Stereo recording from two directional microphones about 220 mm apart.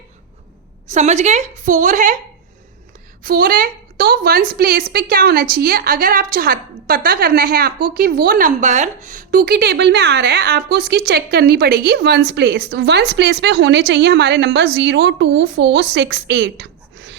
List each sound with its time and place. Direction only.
0.9 s a woman's voice: 30° right (ahead or behind)
3.2 s a woman's voice: 40° right (ahead or behind)